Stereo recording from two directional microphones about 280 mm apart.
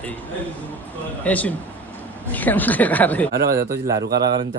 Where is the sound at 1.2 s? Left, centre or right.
Centre.